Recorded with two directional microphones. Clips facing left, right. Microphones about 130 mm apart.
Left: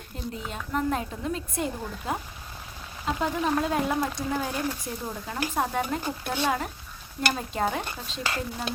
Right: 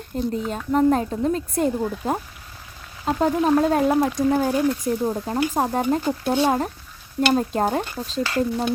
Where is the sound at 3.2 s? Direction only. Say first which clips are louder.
Right 8 dB; 40° right (ahead or behind).